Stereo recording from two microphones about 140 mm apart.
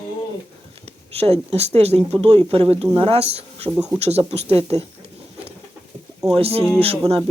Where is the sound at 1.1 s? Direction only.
45° right (ahead or behind).